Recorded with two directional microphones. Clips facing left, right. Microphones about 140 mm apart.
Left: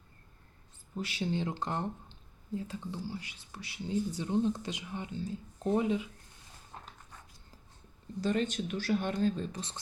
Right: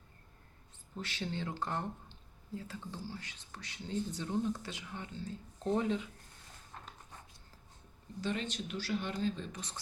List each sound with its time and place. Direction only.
0.9 s speech: 10° left (ahead or behind)
6.7 s a sound: 20° left (ahead or behind)
8.2 s speech: 45° left (ahead or behind)
9.6 s speech: 25° left (ahead or behind)